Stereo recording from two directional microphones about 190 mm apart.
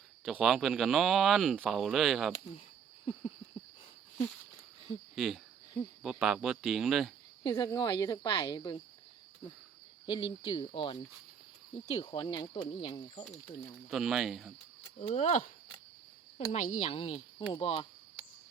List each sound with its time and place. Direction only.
0.3 s speech: centre (ahead or behind)
5.1 s speech: centre (ahead or behind)
7.4 s speech: 20° left (ahead or behind)
10.1 s speech: 25° left (ahead or behind)
13.9 s speech: centre (ahead or behind)
14.9 s speech: 35° left (ahead or behind)